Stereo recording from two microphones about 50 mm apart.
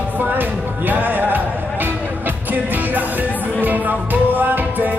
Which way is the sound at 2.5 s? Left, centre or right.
Right.